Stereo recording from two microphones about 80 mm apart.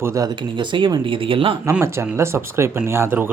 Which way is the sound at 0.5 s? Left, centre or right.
Right.